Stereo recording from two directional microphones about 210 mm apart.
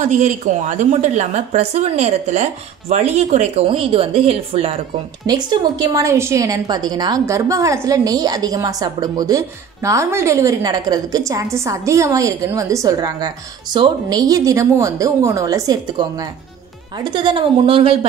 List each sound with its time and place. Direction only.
0.2 s a woman's voice: 35° right (ahead or behind)
5.2 s a woman's voice: 20° right (ahead or behind)